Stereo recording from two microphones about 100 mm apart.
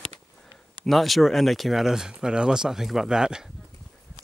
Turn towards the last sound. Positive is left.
turn(degrees=-5)  # may be behind; listen again after turning